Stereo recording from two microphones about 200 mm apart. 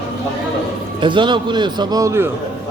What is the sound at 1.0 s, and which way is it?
Speech, 25° right (ahead or behind).